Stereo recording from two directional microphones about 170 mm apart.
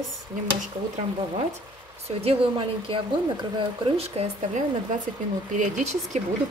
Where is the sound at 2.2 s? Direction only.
35° right (ahead or behind).